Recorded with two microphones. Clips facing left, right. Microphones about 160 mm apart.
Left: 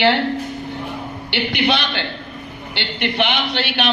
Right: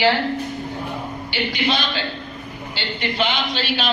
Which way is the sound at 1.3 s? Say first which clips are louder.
Left 3 dB; 70° left (ahead or behind).